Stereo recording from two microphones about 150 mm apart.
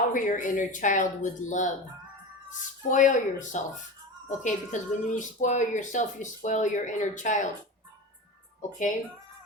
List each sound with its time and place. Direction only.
0.1 s speech: 60° left (ahead or behind)